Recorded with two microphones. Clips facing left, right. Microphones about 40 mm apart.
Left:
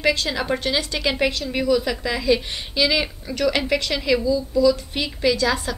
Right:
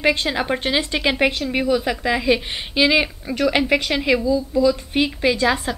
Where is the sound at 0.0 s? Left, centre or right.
Right.